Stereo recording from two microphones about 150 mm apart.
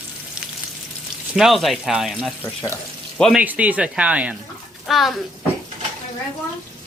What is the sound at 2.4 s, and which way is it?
Speech, 15° left (ahead or behind).